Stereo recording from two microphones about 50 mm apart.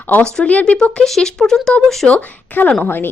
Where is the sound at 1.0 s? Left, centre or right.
Centre.